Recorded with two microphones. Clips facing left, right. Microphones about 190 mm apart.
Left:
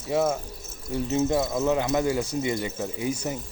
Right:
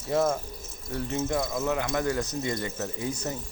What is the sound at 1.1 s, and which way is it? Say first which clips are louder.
Speech: left 5 dB; 20° left (ahead or behind).